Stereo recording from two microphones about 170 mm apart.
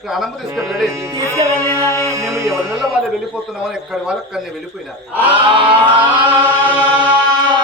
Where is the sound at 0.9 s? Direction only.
20° right (ahead or behind).